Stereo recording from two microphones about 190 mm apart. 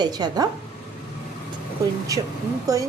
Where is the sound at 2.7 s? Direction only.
15° right (ahead or behind).